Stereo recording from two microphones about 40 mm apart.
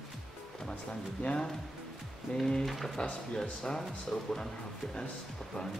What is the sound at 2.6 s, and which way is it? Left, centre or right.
Speech, centre.